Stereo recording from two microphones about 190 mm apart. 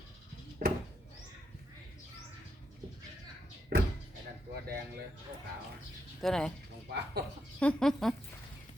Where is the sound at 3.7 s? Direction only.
55° right (ahead or behind).